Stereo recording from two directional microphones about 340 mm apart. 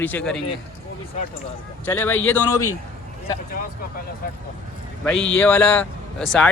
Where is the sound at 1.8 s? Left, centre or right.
Centre.